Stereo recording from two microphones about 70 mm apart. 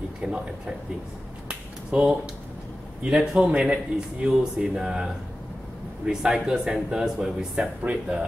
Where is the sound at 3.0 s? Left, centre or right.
Centre.